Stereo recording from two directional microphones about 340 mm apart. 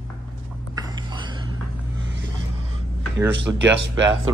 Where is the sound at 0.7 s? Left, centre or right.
Centre.